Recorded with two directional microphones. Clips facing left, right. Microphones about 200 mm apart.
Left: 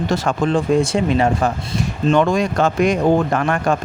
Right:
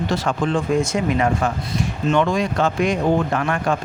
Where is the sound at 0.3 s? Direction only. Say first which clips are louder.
Left 4 dB; 35° left (ahead or behind).